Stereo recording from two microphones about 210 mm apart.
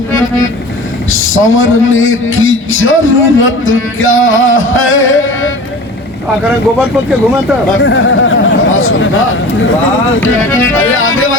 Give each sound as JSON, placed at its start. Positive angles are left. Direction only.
{"t": 1.1, "sound": "a man's voice", "side_deg": 70}
{"t": 7.8, "sound": "speech", "side_deg": 65}
{"t": 10.5, "sound": "music", "side_deg": 10}
{"t": 10.8, "sound": "a man's voice", "side_deg": 75}